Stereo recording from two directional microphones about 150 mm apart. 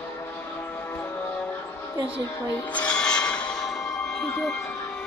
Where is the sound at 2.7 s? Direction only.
10° left (ahead or behind).